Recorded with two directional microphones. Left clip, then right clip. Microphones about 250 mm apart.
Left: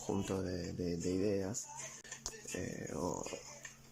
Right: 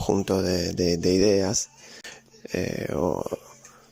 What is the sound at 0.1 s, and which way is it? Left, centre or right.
Speech, right.